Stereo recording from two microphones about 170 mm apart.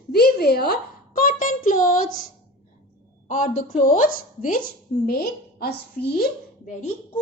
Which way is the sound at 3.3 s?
50° left (ahead or behind).